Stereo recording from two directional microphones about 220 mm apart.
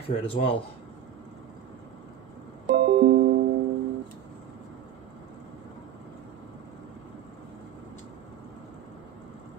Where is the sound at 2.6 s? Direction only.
50° right (ahead or behind).